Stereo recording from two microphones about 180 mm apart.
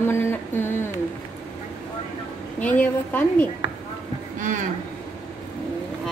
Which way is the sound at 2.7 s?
10° left (ahead or behind).